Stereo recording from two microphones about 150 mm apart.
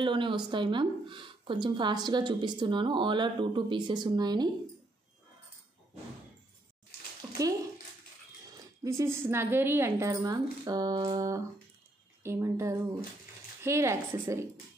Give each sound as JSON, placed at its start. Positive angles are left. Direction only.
{"t": 0.0, "sound": "speech", "side_deg": -35}
{"t": 7.2, "sound": "a sound", "side_deg": -35}
{"t": 8.5, "sound": "a woman's voice", "side_deg": -20}